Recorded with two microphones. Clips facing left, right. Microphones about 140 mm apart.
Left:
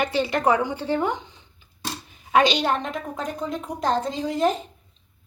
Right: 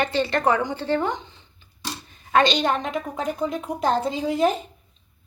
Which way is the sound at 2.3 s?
10° left (ahead or behind).